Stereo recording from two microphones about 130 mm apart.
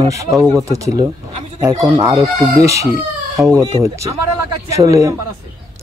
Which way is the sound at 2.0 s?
25° right (ahead or behind).